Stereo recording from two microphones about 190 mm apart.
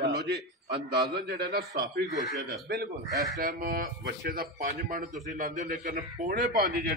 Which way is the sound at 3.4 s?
50° right (ahead or behind).